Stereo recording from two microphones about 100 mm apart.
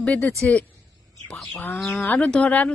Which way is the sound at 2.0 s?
15° left (ahead or behind).